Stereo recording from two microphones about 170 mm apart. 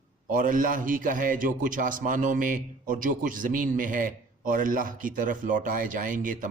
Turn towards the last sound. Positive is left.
turn(degrees=-50)  # may be behind; listen again after turning